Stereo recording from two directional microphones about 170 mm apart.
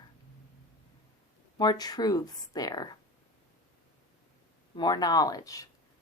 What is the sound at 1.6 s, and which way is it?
A woman's voice, 20° left (ahead or behind).